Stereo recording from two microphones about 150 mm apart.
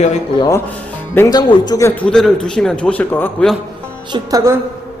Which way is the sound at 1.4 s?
30° left (ahead or behind).